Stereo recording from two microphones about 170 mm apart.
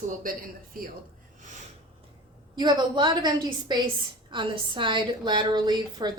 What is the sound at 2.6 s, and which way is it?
A woman's voice, 25° right (ahead or behind).